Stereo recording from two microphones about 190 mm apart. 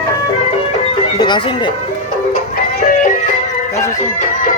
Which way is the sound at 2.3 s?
45° left (ahead or behind).